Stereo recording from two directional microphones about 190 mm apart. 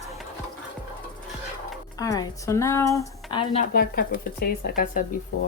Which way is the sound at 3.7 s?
55° left (ahead or behind).